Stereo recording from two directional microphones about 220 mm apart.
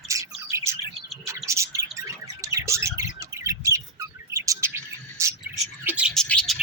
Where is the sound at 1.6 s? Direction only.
15° right (ahead or behind).